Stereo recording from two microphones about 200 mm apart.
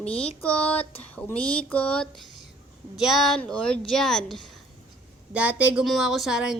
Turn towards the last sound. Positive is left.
turn(degrees=-5)  # may be behind; listen again after turning